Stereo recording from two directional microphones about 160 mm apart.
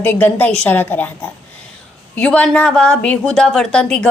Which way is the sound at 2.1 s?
5° left (ahead or behind).